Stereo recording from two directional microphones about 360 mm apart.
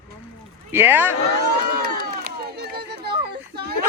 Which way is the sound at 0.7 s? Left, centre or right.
Centre.